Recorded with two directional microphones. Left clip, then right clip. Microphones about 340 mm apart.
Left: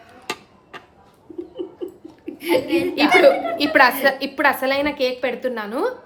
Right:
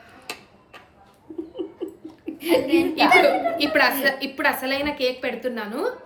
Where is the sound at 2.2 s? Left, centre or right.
Centre.